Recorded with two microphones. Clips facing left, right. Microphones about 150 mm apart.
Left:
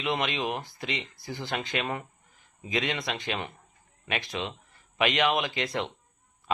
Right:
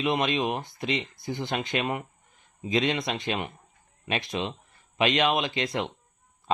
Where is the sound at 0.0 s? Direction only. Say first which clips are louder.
Right 4 dB; 20° right (ahead or behind).